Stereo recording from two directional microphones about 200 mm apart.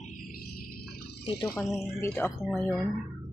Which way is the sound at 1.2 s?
20° left (ahead or behind).